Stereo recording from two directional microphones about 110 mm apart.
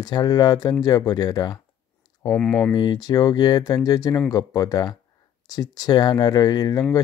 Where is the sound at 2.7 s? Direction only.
40° left (ahead or behind).